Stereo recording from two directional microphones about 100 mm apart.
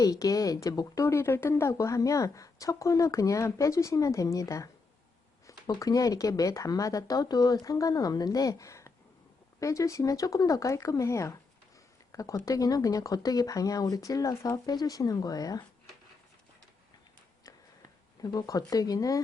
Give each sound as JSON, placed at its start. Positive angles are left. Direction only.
{"t": 0.0, "sound": "speech", "side_deg": 35}
{"t": 18.2, "sound": "speech", "side_deg": 40}